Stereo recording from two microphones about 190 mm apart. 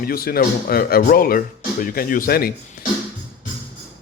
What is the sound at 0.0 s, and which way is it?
Speech, 50° left (ahead or behind).